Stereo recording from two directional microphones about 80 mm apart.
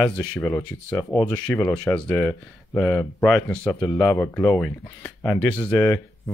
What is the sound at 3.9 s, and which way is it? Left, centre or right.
Speech, left.